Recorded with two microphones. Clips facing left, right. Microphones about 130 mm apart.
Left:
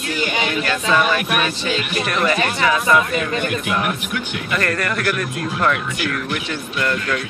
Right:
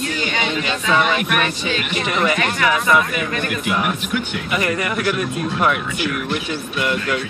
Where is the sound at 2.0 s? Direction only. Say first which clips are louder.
Even; 15° right (ahead or behind).